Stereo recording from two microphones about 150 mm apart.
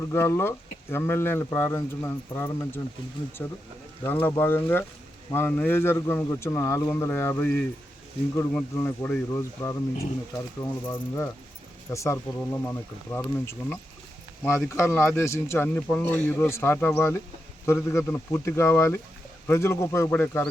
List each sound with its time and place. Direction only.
0.1 s speech: 15° left (ahead or behind)
14.8 s speech: 20° left (ahead or behind)